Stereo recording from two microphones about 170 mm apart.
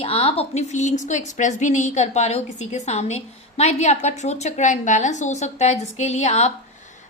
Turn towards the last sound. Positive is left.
turn(degrees=40)  # may be behind; listen again after turning